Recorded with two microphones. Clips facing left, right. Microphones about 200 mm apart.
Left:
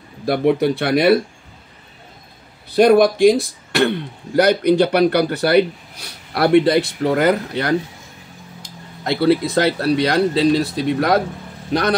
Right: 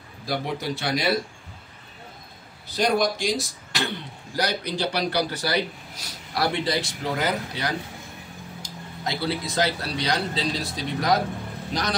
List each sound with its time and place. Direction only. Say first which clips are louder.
0.2 s speech: left 13 dB; 60° left (ahead or behind)
2.7 s speech: left 11 dB; 60° left (ahead or behind)